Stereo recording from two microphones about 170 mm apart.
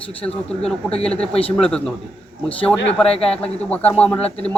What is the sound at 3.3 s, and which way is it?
Speech, 5° left (ahead or behind).